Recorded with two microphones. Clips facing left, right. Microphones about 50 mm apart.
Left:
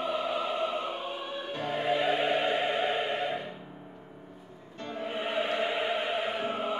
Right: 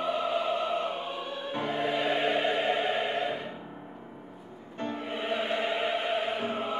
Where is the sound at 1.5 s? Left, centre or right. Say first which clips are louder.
Right 2 dB; centre.